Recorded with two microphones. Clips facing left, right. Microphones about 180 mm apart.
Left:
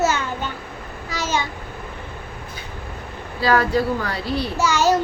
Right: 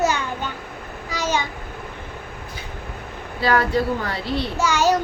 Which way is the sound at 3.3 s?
25° right (ahead or behind).